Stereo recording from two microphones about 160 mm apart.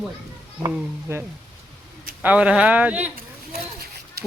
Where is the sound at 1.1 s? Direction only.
15° right (ahead or behind).